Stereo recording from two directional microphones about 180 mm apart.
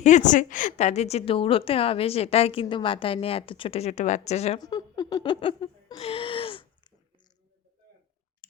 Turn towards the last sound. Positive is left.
turn(degrees=30)  # may be behind; listen again after turning